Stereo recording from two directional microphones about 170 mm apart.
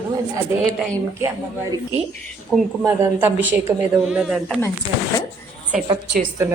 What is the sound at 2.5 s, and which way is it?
Speech, 5° left (ahead or behind).